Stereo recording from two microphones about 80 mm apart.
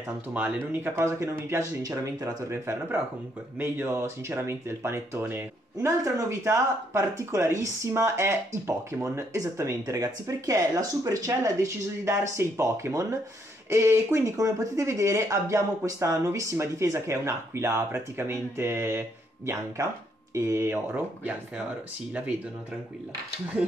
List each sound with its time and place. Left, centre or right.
0.3 s speech: centre
0.8 s speech: right
2.5 s speech: right